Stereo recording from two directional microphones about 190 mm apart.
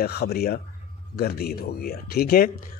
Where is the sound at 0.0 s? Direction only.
55° left (ahead or behind).